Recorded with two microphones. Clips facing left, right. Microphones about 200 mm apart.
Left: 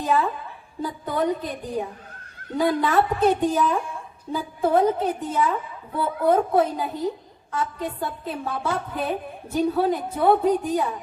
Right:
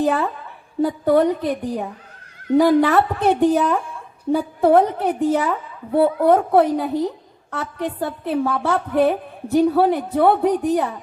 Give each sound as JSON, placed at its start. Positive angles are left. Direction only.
{"t": 0.0, "sound": "a woman's voice", "side_deg": -65}